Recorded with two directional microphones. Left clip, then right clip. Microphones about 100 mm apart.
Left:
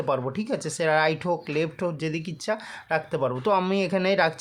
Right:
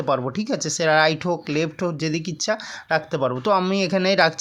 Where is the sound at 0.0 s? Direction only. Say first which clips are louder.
Right 4 dB; 35° right (ahead or behind).